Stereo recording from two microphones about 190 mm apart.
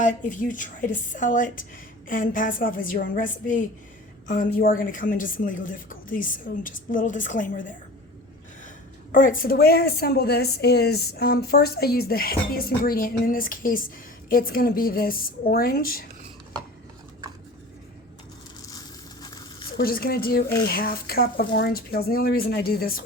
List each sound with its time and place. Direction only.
0.0 s a woman's voice: 40° left (ahead or behind)
9.1 s a woman's voice: 45° left (ahead or behind)
19.7 s a woman's voice: 50° left (ahead or behind)